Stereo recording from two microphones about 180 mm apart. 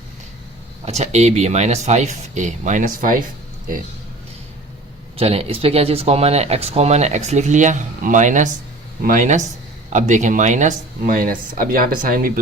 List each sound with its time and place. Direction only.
0.9 s speech: 35° right (ahead or behind)
5.1 s speech: 35° right (ahead or behind); by 12.3 s 50° right (ahead or behind)